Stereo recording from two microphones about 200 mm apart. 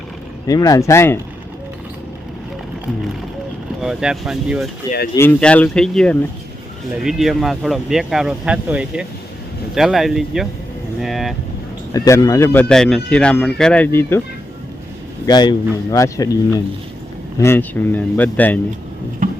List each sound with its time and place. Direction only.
0.4 s speech: 15° left (ahead or behind)
3.8 s speech: 5° right (ahead or behind)
5.1 s speech: 10° left (ahead or behind)
11.9 s speech: 15° left (ahead or behind)
15.3 s speech: 20° left (ahead or behind)
17.4 s speech: 10° left (ahead or behind)
19.2 s tick-tock: 45° right (ahead or behind)